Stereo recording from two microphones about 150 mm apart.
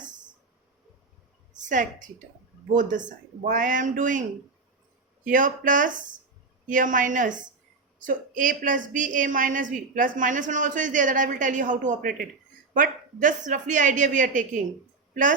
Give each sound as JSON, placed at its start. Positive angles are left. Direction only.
{"t": 1.5, "sound": "a woman's voice", "side_deg": -55}
{"t": 3.4, "sound": "a woman's voice", "side_deg": -60}
{"t": 5.2, "sound": "a woman's voice", "side_deg": -60}